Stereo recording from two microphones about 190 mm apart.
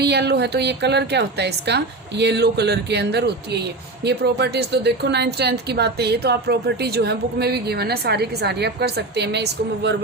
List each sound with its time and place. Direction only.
0.0 s a woman's voice: 60° right (ahead or behind)